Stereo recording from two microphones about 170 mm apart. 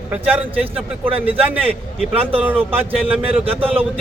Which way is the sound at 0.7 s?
35° right (ahead or behind).